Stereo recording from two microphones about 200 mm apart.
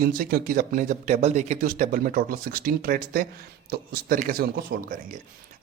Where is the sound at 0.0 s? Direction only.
45° right (ahead or behind).